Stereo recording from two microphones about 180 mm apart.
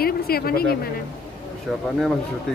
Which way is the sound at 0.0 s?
55° left (ahead or behind).